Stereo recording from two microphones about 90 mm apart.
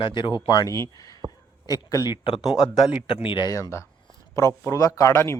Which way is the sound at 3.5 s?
35° left (ahead or behind).